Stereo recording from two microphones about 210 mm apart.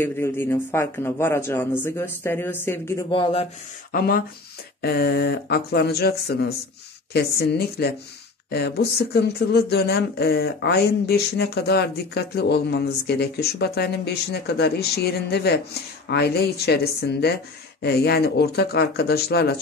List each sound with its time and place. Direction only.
0.0 s speech: 10° left (ahead or behind)
3.1 s speech: 25° left (ahead or behind)
3.9 s speech: 45° left (ahead or behind)